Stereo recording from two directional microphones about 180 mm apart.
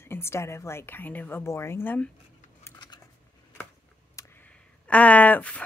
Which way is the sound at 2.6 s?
20° left (ahead or behind).